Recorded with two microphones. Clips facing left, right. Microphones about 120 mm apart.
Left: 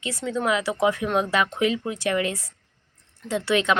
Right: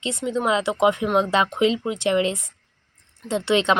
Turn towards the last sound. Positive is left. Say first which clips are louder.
# right 2 dB
turn(degrees=-25)  # may be behind; listen again after turning